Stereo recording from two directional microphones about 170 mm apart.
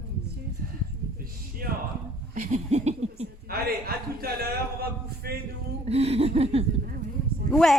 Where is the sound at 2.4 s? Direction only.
40° right (ahead or behind).